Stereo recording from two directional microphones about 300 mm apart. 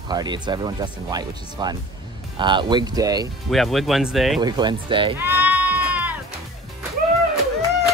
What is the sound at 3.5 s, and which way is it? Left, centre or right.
Speech, centre.